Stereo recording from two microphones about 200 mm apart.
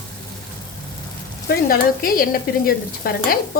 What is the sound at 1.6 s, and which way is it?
Speech, 45° left (ahead or behind).